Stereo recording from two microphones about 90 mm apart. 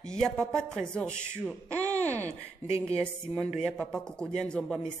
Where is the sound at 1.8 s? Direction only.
30° right (ahead or behind).